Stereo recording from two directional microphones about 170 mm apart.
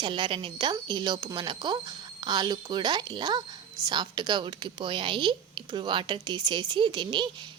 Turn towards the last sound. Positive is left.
turn(degrees=-25)  # may be behind; listen again after turning